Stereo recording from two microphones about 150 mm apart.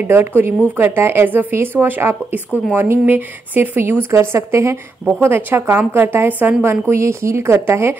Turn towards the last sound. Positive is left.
turn(degrees=-15)  # may be behind; listen again after turning